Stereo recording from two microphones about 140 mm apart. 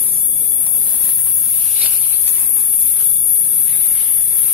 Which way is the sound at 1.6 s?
5° right (ahead or behind).